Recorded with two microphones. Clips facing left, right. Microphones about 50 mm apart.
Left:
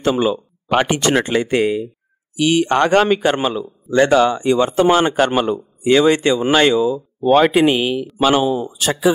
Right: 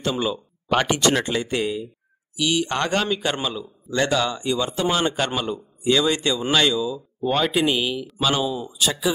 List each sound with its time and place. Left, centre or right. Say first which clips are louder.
0.0 s a man's voice: left 7 dB; left
4.5 s a man's voice: left 9 dB; left
6.7 s speech: left 8 dB; left
7.4 s a man's voice: left 7 dB; left